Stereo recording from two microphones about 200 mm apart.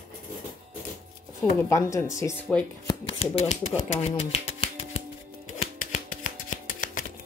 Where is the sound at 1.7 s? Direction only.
15° left (ahead or behind).